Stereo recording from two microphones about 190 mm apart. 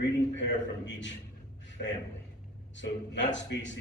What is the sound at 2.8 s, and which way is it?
Speech, 75° left (ahead or behind).